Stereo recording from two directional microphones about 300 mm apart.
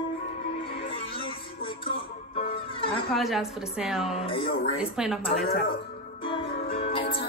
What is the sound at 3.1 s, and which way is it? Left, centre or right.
A woman's voice, centre.